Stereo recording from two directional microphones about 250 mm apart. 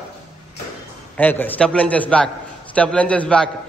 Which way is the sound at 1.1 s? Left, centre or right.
Centre.